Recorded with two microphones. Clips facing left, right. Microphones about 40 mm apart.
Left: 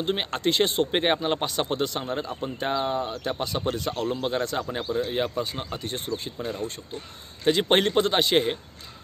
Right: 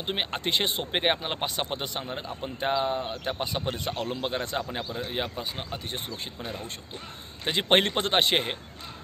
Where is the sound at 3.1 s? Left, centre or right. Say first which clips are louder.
Left 2 dB; centre.